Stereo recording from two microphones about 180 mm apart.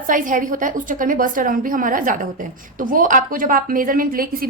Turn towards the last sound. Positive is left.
turn(degrees=-55)  # may be behind; listen again after turning